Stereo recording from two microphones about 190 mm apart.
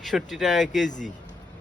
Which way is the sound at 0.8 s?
40° left (ahead or behind).